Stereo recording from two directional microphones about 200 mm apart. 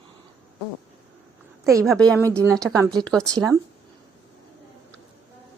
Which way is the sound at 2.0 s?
5° left (ahead or behind).